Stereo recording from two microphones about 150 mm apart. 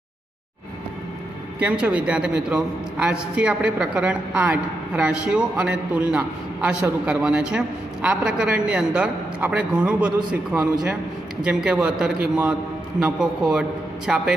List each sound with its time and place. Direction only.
1.6 s a man's voice: 10° right (ahead or behind)
10.5 s a man's voice: 25° right (ahead or behind)
11.4 s a man's voice: 5° right (ahead or behind)